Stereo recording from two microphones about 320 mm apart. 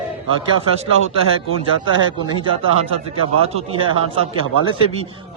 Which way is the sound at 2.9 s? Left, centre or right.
Centre.